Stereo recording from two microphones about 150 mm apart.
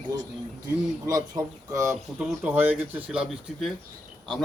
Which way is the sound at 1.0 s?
25° right (ahead or behind).